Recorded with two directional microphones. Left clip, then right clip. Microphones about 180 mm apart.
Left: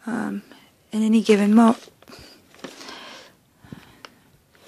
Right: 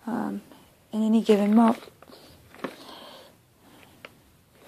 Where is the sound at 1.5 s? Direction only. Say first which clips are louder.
Left 4 dB; 45° left (ahead or behind).